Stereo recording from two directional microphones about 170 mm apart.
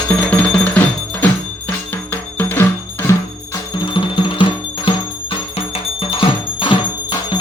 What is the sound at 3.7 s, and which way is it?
Music, 25° left (ahead or behind).